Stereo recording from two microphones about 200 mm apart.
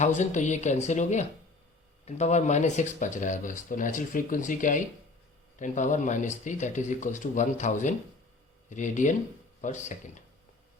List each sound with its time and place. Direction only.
0.0 s speech: 35° left (ahead or behind)